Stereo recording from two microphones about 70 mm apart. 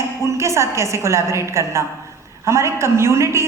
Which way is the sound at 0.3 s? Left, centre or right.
Right.